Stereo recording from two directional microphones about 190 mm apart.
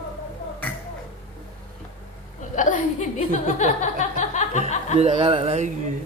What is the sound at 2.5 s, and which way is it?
Chuckle, 40° left (ahead or behind).